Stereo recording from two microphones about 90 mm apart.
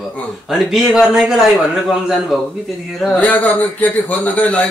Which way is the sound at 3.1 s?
15° left (ahead or behind).